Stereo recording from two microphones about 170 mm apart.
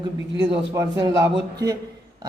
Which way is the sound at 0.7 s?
20° right (ahead or behind).